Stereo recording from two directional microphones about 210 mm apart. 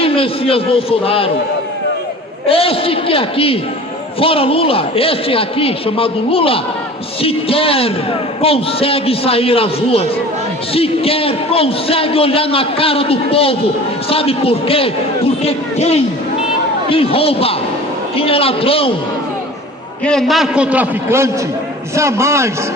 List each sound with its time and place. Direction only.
0.0 s a man's voice: 25° left (ahead or behind)
2.5 s a man's voice: 25° left (ahead or behind)
20.1 s a man's voice: centre (ahead or behind)